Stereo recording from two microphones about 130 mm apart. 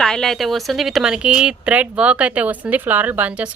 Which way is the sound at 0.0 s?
5° left (ahead or behind).